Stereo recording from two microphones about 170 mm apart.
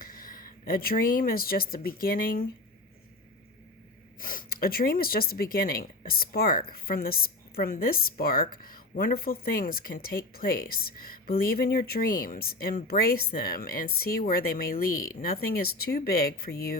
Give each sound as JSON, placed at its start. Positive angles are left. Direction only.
{"t": 0.0, "sound": "speech", "side_deg": 55}
{"t": 4.2, "sound": "speech", "side_deg": 55}